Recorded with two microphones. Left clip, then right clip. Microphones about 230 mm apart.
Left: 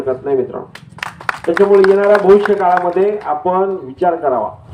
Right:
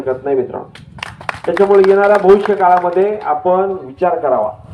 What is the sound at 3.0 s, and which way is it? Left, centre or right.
A man's voice, right.